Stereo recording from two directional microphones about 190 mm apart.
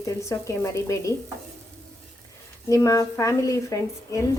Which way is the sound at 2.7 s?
15° left (ahead or behind).